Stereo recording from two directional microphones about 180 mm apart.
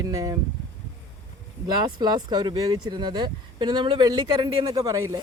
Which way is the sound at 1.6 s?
25° right (ahead or behind).